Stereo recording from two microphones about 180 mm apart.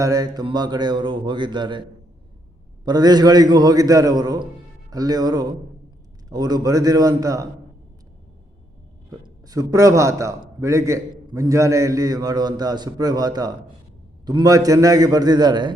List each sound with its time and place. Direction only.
0.0 s a man's voice: 20° right (ahead or behind)
2.8 s a man's voice: 20° right (ahead or behind)
9.0 s a man's voice: 20° right (ahead or behind)